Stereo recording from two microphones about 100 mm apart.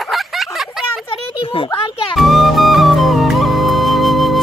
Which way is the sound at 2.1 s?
Centre (ahead or behind).